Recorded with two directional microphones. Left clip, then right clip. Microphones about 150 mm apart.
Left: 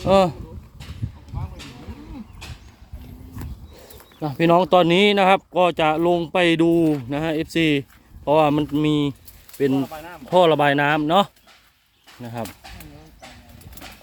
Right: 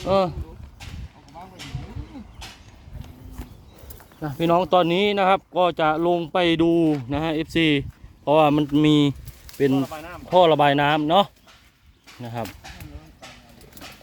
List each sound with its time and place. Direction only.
0.0 s speech: 25° left (ahead or behind)
1.3 s a sound: 40° right (ahead or behind)
4.2 s speech: 25° left (ahead or behind); by 8.7 s 5° right (ahead or behind)
8.7 s speech: 25° right (ahead or behind)
9.7 s speech: 35° right (ahead or behind)
10.2 s speech: 10° left (ahead or behind)
12.2 s speech: 10° right (ahead or behind)